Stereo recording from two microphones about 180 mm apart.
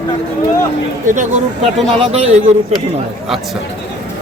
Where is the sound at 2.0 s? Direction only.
35° right (ahead or behind).